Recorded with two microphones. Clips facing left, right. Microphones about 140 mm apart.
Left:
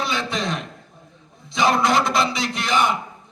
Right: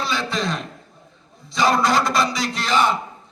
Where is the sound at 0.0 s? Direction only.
20° left (ahead or behind).